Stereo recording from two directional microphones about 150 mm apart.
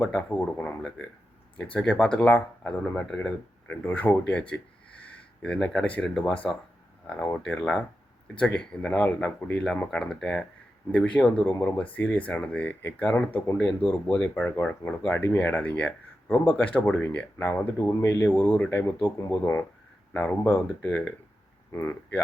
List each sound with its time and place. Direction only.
0.0 s speech: 10° left (ahead or behind)